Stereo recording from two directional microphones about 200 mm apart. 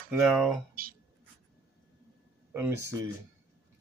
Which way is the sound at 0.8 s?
45° right (ahead or behind).